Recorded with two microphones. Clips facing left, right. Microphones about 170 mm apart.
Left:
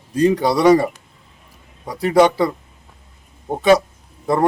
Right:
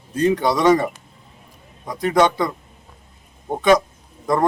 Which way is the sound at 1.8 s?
10° left (ahead or behind).